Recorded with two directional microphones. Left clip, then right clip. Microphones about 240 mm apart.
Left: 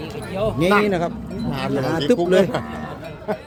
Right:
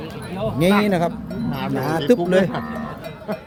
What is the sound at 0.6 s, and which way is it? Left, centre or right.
Speech, centre.